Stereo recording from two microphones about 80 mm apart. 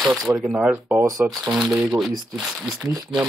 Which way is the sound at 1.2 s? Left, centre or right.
Centre.